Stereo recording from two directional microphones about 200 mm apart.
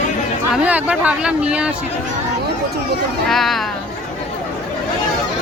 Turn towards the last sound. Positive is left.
turn(degrees=0)  # may be behind; listen again after turning